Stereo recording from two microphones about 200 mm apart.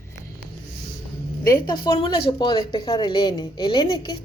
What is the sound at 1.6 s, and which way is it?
A woman's voice, 20° left (ahead or behind).